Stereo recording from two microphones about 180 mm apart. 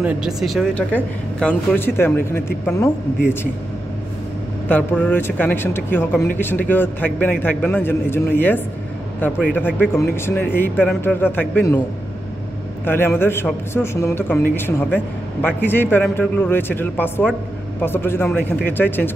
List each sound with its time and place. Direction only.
0.0 s speech: 5° right (ahead or behind); by 2.9 s 15° left (ahead or behind)
4.6 s speech: 10° left (ahead or behind)
12.8 s speech: 10° left (ahead or behind)